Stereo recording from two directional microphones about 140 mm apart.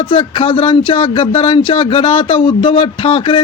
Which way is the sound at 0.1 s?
40° left (ahead or behind).